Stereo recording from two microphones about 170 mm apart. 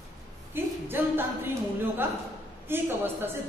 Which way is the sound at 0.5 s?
10° right (ahead or behind).